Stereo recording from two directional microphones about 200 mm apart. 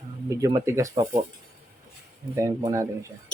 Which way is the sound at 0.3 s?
15° right (ahead or behind).